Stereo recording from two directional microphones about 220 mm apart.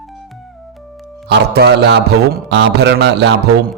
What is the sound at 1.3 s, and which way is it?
A man's voice, 50° right (ahead or behind).